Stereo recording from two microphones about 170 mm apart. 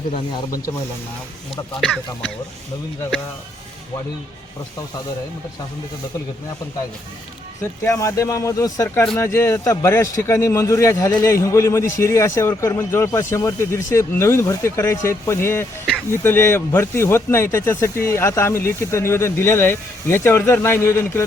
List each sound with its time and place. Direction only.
1.8 s speech: 5° left (ahead or behind)
7.6 s speech: 15° left (ahead or behind)